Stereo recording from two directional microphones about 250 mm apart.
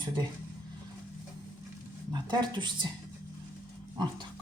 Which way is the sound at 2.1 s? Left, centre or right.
Centre.